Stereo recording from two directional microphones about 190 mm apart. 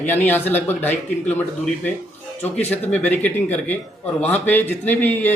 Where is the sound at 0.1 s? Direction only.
10° left (ahead or behind).